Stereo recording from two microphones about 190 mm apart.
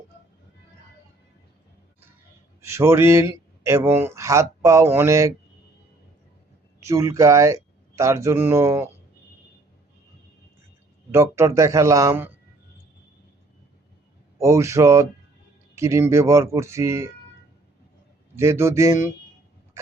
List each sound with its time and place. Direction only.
2.6 s speech: 15° right (ahead or behind)
6.8 s speech: 15° right (ahead or behind)
11.1 s speech: 15° right (ahead or behind)
14.3 s speech: 15° right (ahead or behind)
18.3 s speech: 15° right (ahead or behind)